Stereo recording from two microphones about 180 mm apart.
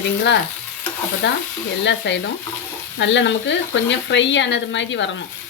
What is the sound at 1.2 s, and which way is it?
Speech, 90° left.